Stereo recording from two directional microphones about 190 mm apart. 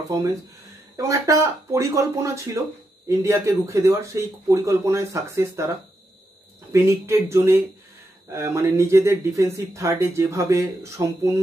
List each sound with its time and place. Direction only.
0.9 s speech: 15° right (ahead or behind)
6.7 s speech: 15° right (ahead or behind)